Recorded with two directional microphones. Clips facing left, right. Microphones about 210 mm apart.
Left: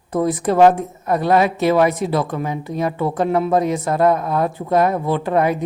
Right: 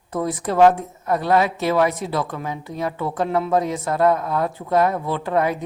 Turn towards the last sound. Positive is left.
turn(degrees=20)  # may be behind; listen again after turning